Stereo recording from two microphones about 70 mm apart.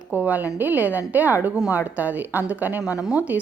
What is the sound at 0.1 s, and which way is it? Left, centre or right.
A woman's voice, right.